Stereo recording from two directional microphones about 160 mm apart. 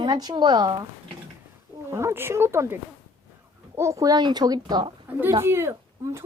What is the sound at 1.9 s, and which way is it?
A woman's voice, 15° right (ahead or behind).